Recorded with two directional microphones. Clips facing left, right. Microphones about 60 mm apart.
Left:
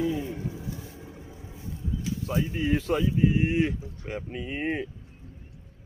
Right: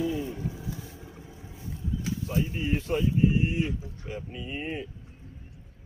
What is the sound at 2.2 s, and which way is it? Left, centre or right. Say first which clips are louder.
Speech: left 3 dB; left.